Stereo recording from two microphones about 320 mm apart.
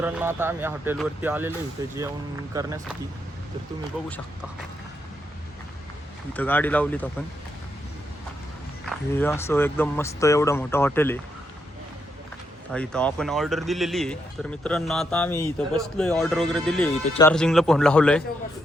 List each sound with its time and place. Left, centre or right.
0.0 s speech: centre
6.3 s a man's voice: centre
8.8 s speech: centre
12.7 s a man's voice: centre